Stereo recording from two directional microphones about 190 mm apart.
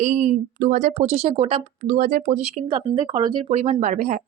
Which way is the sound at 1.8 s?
45° right (ahead or behind).